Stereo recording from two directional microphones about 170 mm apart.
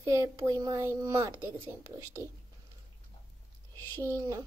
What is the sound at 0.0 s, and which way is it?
Speech, 15° right (ahead or behind).